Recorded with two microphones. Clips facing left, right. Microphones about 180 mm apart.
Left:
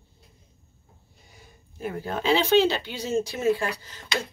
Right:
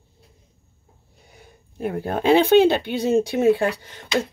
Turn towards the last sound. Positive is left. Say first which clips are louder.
# right 6 dB
turn(degrees=-65)  # may be behind; listen again after turning